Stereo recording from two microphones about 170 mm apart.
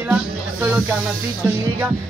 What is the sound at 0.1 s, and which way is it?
Snake, 10° right (ahead or behind).